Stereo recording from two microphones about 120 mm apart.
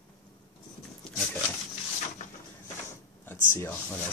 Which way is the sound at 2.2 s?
90° left.